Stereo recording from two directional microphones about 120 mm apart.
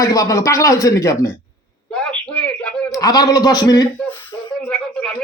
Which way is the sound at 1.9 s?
10° left (ahead or behind).